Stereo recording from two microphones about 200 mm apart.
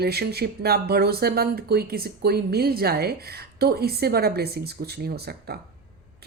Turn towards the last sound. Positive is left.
turn(degrees=-55)  # may be behind; listen again after turning